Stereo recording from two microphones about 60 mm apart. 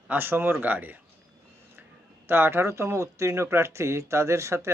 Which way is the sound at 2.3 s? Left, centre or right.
Right.